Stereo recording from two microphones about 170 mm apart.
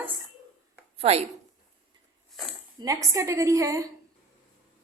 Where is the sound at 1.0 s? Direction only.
35° right (ahead or behind).